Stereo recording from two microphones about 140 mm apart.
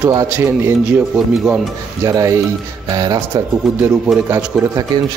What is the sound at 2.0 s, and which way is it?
A man's voice, 20° right (ahead or behind).